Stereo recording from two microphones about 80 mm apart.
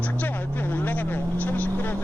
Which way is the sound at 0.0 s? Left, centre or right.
Left.